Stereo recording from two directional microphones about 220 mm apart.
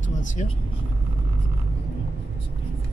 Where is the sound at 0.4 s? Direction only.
30° left (ahead or behind).